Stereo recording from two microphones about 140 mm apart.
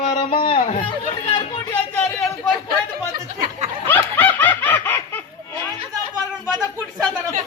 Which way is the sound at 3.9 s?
15° left (ahead or behind).